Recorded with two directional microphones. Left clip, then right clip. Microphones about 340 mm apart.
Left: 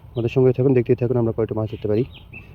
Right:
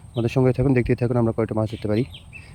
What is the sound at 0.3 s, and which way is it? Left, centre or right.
Speech, centre.